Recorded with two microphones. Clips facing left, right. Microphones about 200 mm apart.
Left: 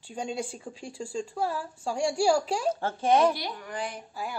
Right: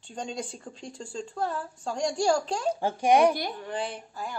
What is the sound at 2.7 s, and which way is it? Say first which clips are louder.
Speech: right 3 dB; 15° right (ahead or behind).